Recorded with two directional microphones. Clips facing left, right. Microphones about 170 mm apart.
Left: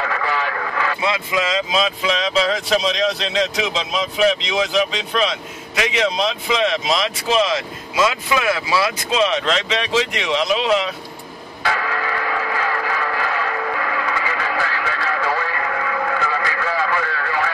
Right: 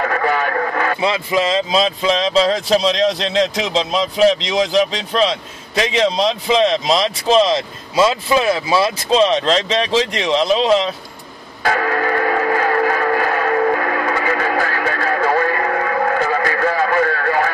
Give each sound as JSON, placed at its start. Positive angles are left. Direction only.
{"t": 0.0, "sound": "radio", "side_deg": -50}
{"t": 1.0, "sound": "speech", "side_deg": -30}
{"t": 11.6, "sound": "music", "side_deg": -50}